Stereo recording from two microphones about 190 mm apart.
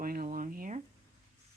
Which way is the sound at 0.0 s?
50° right (ahead or behind).